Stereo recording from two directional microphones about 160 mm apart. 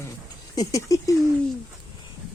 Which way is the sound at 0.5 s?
20° left (ahead or behind).